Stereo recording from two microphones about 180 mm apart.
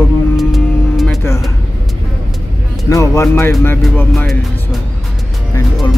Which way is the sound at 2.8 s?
20° left (ahead or behind).